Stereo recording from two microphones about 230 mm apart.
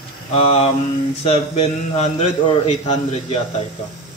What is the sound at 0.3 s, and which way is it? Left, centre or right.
A man's voice, left.